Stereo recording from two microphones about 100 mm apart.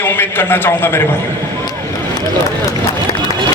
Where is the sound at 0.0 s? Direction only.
20° left (ahead or behind).